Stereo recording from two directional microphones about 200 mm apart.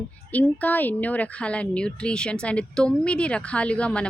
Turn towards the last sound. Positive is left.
turn(degrees=5)  # may be behind; listen again after turning